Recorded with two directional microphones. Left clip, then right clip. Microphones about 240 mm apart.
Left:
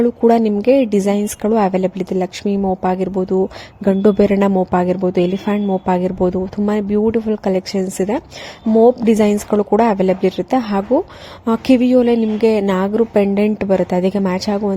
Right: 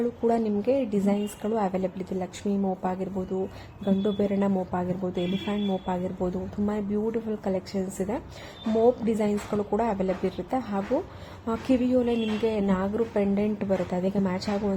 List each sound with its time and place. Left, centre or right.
0.0 s a woman's voice: left